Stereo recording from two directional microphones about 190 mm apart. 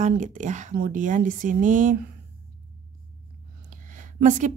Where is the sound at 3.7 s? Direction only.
40° right (ahead or behind).